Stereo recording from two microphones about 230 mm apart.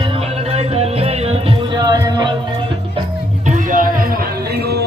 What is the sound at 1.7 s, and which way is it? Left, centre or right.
Music, centre.